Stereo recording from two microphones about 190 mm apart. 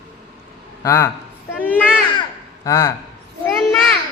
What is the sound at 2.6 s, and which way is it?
Speech, 15° left (ahead or behind).